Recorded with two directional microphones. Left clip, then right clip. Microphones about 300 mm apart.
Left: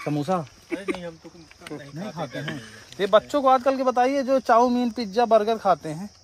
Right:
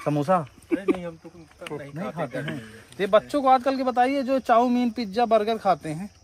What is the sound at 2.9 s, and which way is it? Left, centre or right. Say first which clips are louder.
Speech: left 1 dB; centre.